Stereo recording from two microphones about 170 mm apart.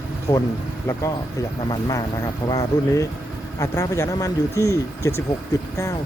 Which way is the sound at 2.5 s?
20° left (ahead or behind).